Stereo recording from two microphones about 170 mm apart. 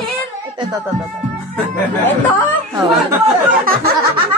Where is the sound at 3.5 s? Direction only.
60° right (ahead or behind).